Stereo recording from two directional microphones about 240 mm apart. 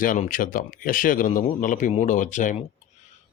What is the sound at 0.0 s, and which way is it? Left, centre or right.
Speech, left.